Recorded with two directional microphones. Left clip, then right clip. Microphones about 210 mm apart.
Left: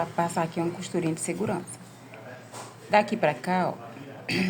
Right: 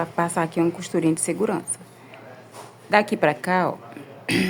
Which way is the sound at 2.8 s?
25° right (ahead or behind).